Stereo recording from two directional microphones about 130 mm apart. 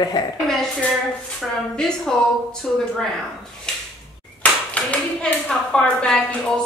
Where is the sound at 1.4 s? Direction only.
5° left (ahead or behind).